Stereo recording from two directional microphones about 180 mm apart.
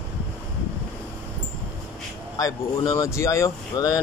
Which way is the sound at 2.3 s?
20° left (ahead or behind).